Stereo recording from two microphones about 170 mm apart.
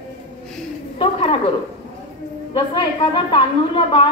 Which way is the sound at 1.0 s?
35° left (ahead or behind).